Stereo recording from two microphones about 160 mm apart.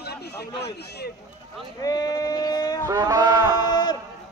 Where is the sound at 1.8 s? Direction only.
25° left (ahead or behind).